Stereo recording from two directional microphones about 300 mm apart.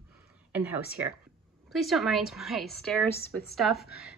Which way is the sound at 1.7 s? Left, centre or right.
Centre.